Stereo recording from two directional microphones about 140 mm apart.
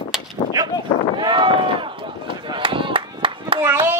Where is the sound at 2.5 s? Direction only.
35° right (ahead or behind).